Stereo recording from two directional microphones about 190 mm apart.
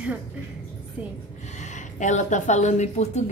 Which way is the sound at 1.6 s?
40° left (ahead or behind).